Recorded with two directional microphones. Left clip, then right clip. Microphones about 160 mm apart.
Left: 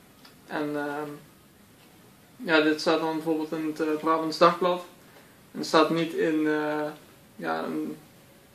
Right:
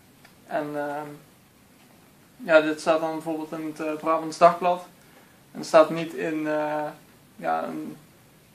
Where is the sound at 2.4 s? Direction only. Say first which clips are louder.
Right 3 dB; 15° right (ahead or behind).